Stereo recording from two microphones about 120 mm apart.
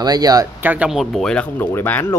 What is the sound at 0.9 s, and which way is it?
Speech, centre (ahead or behind).